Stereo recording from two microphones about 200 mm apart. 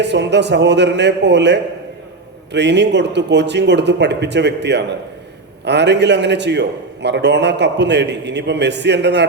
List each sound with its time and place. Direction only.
0.0 s a man's voice: 60° right (ahead or behind)